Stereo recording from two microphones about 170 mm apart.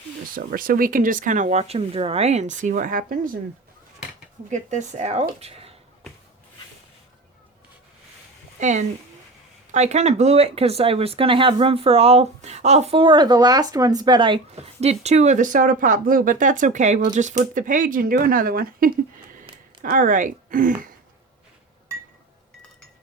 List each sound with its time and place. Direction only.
0.3 s speech: 55° right (ahead or behind)
4.4 s speech: 45° right (ahead or behind)
8.5 s speech: 45° right (ahead or behind)